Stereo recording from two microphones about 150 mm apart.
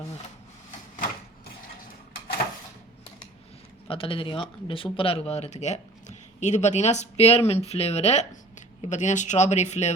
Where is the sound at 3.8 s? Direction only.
35° left (ahead or behind).